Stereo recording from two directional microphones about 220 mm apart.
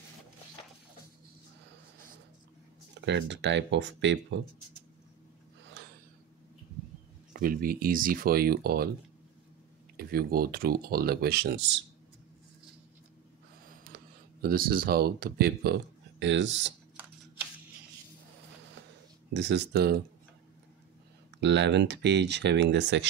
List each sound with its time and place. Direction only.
2.9 s speech: 55° right (ahead or behind)
5.6 s gasp: 55° right (ahead or behind)
7.3 s speech: 40° right (ahead or behind)
9.9 s speech: 45° right (ahead or behind)
14.4 s speech: 40° right (ahead or behind)
19.3 s speech: 50° right (ahead or behind)
21.4 s speech: 50° right (ahead or behind)